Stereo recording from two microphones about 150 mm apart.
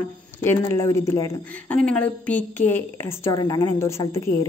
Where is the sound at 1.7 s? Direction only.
10° left (ahead or behind).